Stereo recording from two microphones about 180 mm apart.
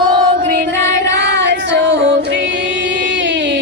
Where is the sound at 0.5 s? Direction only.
60° right (ahead or behind).